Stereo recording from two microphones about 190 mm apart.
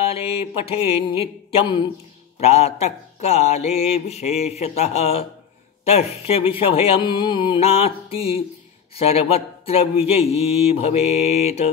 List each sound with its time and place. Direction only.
0.0 s mantra: 30° left (ahead or behind)
2.4 s speech: 35° left (ahead or behind)